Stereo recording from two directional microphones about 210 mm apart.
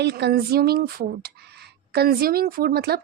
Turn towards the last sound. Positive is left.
turn(degrees=-50)  # may be behind; listen again after turning